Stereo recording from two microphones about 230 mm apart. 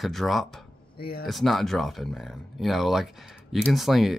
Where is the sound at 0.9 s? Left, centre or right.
Left.